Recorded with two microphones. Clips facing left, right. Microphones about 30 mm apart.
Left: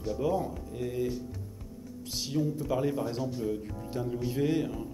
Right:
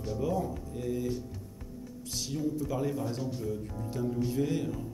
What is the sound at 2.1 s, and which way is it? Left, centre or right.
Speech, left.